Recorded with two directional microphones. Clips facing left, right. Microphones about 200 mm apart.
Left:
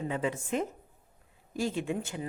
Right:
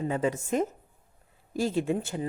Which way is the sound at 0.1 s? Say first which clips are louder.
Right 3 dB; 40° right (ahead or behind).